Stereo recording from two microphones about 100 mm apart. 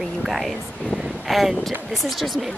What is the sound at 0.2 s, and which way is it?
Speech, centre (ahead or behind).